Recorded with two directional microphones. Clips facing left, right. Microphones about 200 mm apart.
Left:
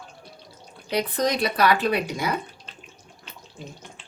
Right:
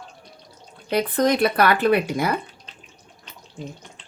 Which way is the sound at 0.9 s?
55° right (ahead or behind).